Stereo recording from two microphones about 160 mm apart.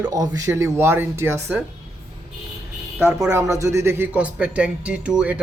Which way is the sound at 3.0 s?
15° right (ahead or behind).